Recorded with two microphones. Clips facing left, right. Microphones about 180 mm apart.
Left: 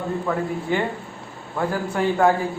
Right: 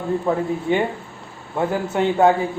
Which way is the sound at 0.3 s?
25° right (ahead or behind).